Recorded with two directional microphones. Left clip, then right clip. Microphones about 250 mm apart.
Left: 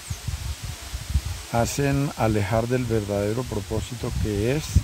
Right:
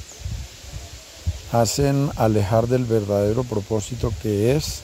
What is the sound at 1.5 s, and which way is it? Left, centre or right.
Speech, right.